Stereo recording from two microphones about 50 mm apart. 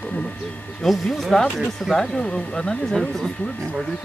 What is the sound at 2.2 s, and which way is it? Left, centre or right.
Speech, centre.